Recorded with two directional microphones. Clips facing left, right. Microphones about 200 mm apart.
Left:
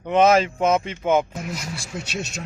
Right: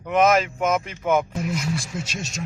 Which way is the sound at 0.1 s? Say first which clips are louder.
Left 2 dB; 30° left (ahead or behind).